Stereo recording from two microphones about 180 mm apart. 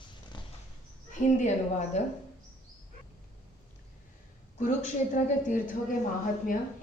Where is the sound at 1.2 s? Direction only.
40° left (ahead or behind).